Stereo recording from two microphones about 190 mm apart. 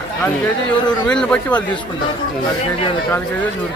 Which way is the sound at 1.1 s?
5° left (ahead or behind).